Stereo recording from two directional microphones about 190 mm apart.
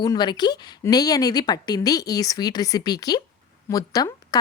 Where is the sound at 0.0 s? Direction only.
20° left (ahead or behind).